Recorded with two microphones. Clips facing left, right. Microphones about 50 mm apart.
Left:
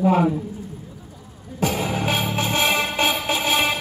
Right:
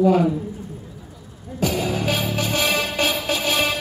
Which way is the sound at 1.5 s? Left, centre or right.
Left.